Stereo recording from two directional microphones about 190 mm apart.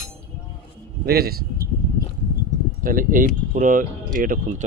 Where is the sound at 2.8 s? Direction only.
45° right (ahead or behind).